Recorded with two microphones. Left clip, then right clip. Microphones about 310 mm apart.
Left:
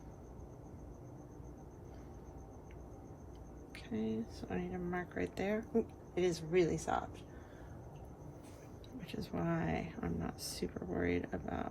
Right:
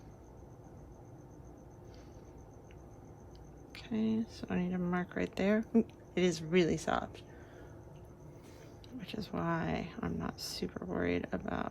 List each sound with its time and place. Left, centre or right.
3.8 s speech: centre
9.0 s speech: centre